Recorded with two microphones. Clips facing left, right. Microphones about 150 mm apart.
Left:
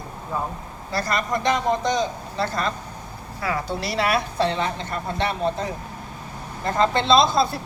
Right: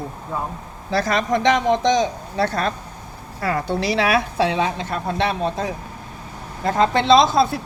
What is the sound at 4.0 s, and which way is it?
A man's voice, 90° right.